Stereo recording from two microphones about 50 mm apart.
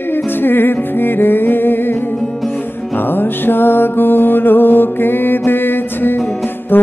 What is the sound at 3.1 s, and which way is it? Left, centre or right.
Music, left.